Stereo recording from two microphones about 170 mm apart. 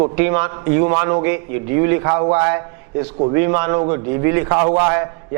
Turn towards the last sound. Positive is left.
turn(degrees=-20)  # may be behind; listen again after turning